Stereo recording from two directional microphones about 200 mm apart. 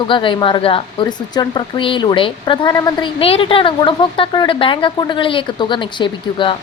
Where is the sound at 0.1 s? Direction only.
25° left (ahead or behind).